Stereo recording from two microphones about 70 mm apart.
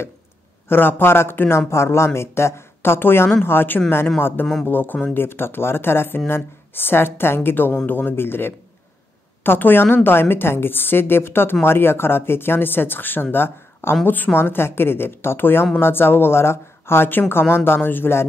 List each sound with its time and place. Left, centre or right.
0.7 s speech: left